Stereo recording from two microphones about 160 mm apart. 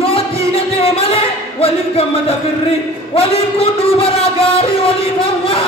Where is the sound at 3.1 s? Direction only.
35° left (ahead or behind).